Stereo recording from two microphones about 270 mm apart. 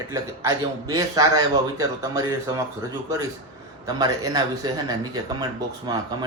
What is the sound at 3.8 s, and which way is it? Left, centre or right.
Speech, centre.